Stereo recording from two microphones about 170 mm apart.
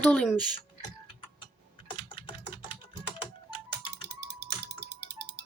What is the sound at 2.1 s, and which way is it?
Typing, 25° left (ahead or behind).